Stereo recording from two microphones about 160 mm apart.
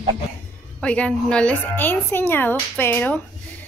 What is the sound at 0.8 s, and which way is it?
A woman's voice, 5° left (ahead or behind).